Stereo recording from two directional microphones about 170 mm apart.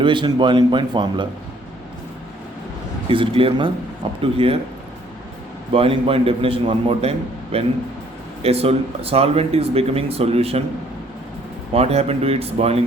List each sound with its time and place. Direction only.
0.0 s speech: 30° right (ahead or behind)
3.1 s speech: 30° right (ahead or behind)
5.7 s speech: 30° right (ahead or behind)
11.7 s speech: 35° right (ahead or behind)